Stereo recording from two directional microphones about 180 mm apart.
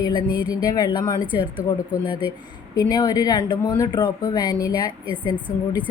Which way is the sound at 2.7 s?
20° left (ahead or behind).